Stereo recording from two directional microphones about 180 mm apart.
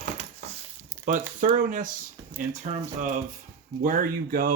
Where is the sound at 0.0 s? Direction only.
45° right (ahead or behind).